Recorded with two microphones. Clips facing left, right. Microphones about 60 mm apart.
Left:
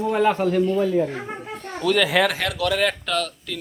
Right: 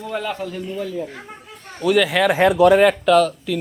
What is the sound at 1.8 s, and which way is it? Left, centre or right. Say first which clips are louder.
Speech: right 2 dB; centre.